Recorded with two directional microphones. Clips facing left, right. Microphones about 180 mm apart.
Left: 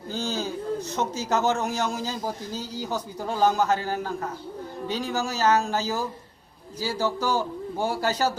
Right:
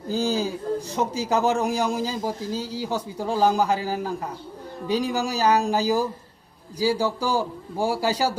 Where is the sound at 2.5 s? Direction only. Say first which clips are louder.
Right 4 dB; 30° right (ahead or behind).